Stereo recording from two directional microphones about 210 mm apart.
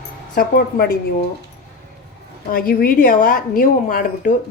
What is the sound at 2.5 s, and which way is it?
A woman's voice, 45° left (ahead or behind).